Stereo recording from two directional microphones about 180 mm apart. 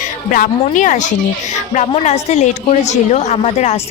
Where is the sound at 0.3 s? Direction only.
45° left (ahead or behind).